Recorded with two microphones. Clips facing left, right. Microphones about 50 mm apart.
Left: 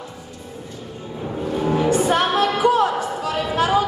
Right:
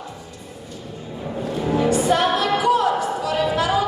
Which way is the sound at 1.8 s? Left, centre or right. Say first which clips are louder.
Even; left.